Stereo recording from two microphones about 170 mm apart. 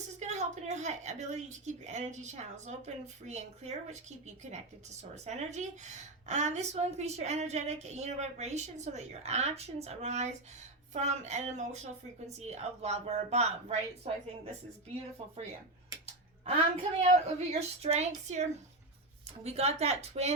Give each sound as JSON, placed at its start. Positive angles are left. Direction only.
{"t": 0.2, "sound": "a woman's voice", "side_deg": -40}
{"t": 15.2, "sound": "speech", "side_deg": -35}
{"t": 16.4, "sound": "speech", "side_deg": -35}
{"t": 19.5, "sound": "speech", "side_deg": -40}